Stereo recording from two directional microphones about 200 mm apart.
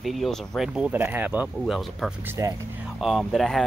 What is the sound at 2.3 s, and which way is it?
Speech, 15° right (ahead or behind).